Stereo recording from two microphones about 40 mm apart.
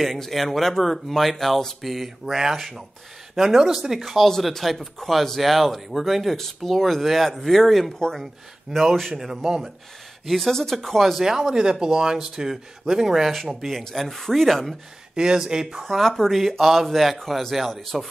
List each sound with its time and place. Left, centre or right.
0.0 s speech: centre
9.1 s speech: centre
11.2 s speech: centre
13.3 s speech: centre
15.1 s speech: centre
15.8 s speech: centre